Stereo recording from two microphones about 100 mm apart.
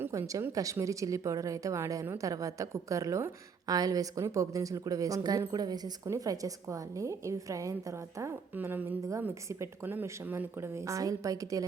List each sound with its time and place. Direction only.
0.1 s a woman's voice: 35° right (ahead or behind)
3.7 s a woman's voice: 40° right (ahead or behind)
8.5 s a woman's voice: 20° right (ahead or behind)